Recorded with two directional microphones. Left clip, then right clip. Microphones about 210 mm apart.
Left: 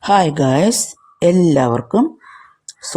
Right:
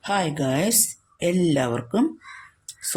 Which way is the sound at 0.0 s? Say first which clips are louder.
Left 11 dB; 30° left (ahead or behind).